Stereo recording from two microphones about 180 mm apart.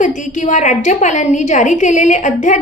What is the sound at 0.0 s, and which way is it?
A woman's voice, 45° left (ahead or behind).